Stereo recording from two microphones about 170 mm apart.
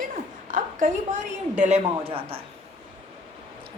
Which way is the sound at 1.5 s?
40° right (ahead or behind).